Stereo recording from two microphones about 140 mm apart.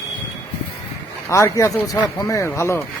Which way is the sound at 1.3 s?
20° left (ahead or behind).